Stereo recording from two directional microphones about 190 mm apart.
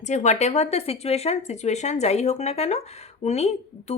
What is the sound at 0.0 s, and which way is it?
Speech, 40° left (ahead or behind).